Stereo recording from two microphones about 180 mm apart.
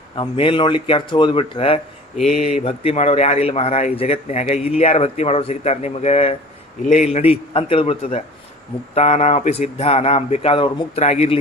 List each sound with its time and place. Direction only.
0.2 s speech: 30° left (ahead or behind)